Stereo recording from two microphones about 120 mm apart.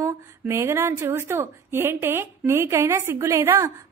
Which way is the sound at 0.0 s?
20° right (ahead or behind).